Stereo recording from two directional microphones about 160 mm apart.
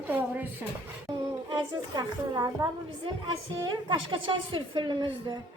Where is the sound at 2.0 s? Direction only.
25° right (ahead or behind).